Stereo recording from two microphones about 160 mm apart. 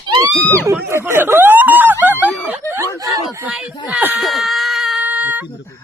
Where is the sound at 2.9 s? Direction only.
20° right (ahead or behind).